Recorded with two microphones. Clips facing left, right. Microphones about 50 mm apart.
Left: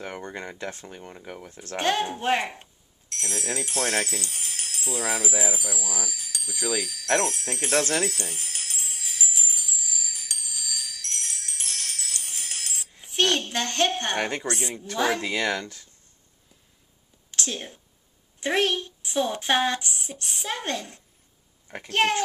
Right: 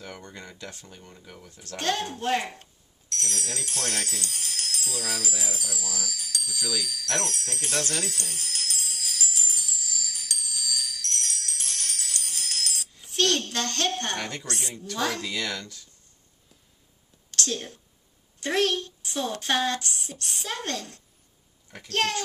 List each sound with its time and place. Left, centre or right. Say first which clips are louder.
0.0 s speech: left 6 dB; left
1.8 s speech: left 3 dB; left
6.9 s music: left 6 dB; left
17.3 s whispering: right 1 dB; centre
18.4 s a child's voice: left 1 dB; left